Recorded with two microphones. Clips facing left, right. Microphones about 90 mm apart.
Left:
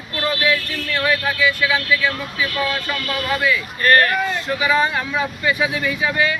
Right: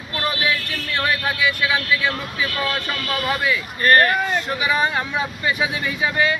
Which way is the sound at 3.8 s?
25° right (ahead or behind).